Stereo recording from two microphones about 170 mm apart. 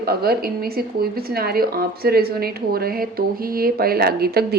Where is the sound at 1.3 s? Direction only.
60° right (ahead or behind).